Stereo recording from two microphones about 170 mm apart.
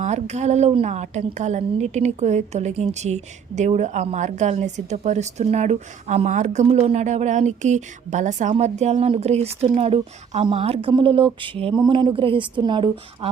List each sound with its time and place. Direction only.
0.0 s a woman's voice: 40° right (ahead or behind)